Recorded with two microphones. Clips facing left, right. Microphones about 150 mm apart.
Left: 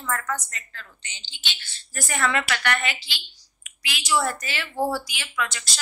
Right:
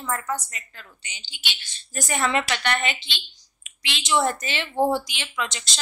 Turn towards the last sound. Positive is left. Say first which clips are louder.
# left 1 dB
turn(degrees=-20)  # may be behind; listen again after turning